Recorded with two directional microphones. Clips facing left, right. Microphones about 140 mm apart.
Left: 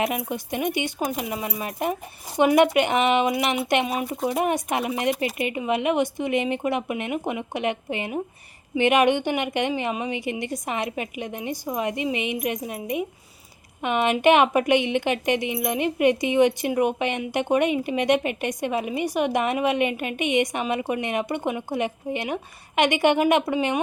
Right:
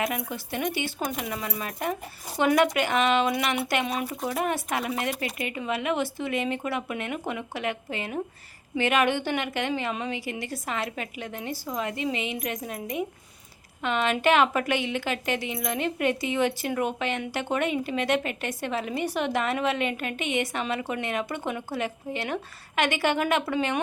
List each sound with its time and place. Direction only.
0.0 s a woman's voice: 20° left (ahead or behind)